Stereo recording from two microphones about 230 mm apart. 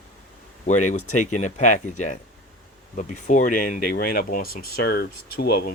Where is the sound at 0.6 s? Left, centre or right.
Left.